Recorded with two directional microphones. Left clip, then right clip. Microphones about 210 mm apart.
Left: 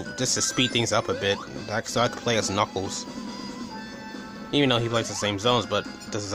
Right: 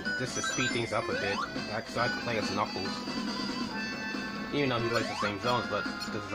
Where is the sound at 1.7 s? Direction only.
45° left (ahead or behind).